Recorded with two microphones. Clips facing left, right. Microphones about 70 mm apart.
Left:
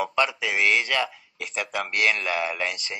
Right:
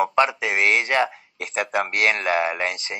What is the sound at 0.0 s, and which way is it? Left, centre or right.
Speech, right.